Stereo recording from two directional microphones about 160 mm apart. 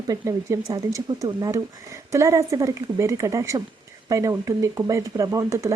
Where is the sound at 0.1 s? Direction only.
20° right (ahead or behind).